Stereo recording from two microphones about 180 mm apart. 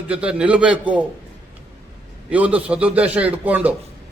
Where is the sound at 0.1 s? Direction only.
5° right (ahead or behind).